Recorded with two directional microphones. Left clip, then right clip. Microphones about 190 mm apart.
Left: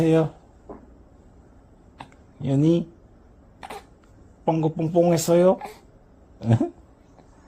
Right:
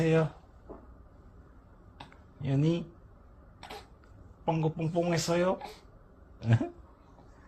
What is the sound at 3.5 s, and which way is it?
Cough, 15° left (ahead or behind).